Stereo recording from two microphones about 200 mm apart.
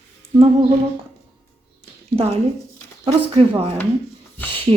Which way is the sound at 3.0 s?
25° right (ahead or behind).